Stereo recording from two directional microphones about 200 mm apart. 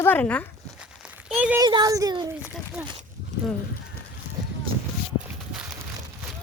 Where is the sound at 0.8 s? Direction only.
5° right (ahead or behind).